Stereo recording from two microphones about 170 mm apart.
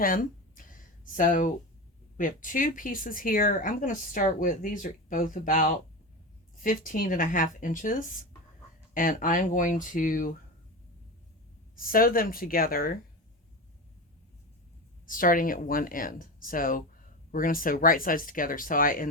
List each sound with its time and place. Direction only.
0.0 s a sound: 55° left (ahead or behind)
2.1 s speech: 50° left (ahead or behind)
11.8 s speech: 55° left (ahead or behind)
15.0 s speech: 55° left (ahead or behind)